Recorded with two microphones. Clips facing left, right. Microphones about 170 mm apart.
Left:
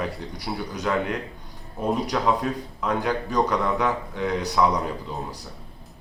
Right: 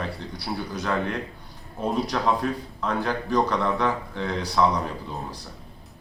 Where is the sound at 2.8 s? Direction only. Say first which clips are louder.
Left 2 dB; 15° left (ahead or behind).